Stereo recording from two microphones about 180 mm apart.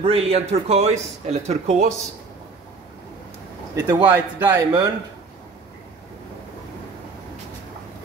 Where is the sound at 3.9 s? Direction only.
10° right (ahead or behind).